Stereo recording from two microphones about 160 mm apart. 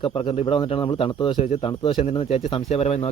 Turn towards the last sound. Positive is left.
turn(degrees=40)  # may be behind; listen again after turning